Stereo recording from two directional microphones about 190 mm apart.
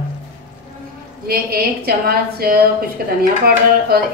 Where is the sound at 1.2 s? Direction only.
55° right (ahead or behind).